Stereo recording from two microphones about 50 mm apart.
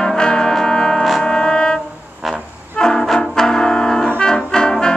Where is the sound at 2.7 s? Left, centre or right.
Centre.